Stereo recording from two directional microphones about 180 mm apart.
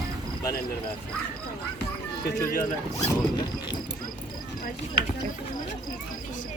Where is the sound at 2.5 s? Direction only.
50° left (ahead or behind).